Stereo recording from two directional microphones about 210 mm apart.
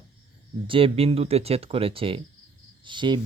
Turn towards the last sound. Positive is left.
turn(degrees=-20)  # may be behind; listen again after turning